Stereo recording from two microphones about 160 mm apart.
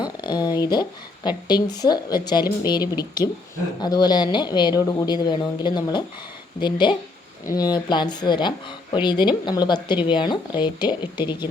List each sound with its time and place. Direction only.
0.0 s a woman's voice: 25° left (ahead or behind)